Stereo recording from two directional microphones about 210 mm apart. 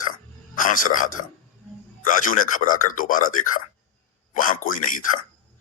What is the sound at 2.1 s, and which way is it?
Speech, 40° left (ahead or behind).